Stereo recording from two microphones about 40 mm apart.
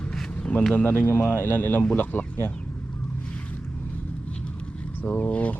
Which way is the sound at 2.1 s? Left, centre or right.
Left.